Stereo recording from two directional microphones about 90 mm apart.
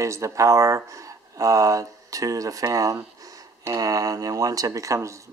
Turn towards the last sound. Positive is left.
turn(degrees=-35)  # may be behind; listen again after turning